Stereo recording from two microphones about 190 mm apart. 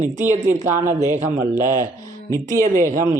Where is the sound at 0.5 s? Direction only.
15° right (ahead or behind).